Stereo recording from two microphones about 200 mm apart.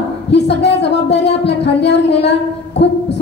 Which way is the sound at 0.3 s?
60° left (ahead or behind).